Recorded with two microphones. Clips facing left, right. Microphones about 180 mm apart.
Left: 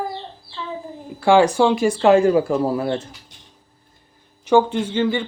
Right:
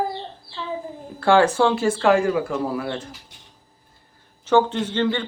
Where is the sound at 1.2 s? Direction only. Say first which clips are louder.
Left 2 dB; 15° left (ahead or behind); by 3.1 s 30° left (ahead or behind).